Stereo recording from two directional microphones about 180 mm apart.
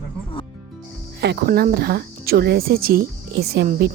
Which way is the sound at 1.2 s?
65° right (ahead or behind).